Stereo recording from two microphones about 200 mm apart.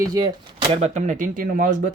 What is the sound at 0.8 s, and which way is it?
Speech, 35° right (ahead or behind).